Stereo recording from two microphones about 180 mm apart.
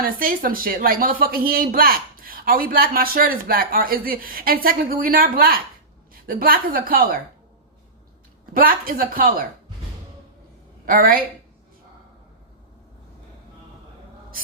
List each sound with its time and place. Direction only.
0.0 s speech: 50° right (ahead or behind)
8.5 s speech: 55° right (ahead or behind)
10.8 s speech: 55° right (ahead or behind)